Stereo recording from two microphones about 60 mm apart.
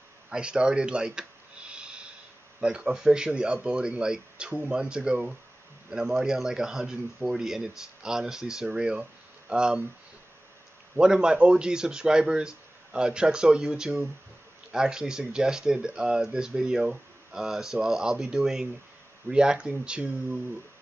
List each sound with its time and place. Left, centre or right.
0.3 s speech: centre
1.7 s snort: centre
2.6 s speech: centre
11.0 s speech: centre